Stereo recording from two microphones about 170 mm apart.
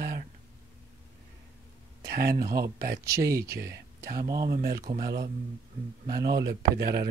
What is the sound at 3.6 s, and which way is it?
Speech, 60° right (ahead or behind).